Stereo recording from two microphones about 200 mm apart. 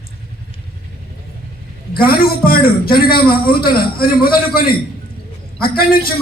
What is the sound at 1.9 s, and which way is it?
A man's voice, 50° left (ahead or behind).